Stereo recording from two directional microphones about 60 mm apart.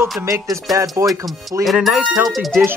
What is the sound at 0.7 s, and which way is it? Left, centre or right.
Music, centre.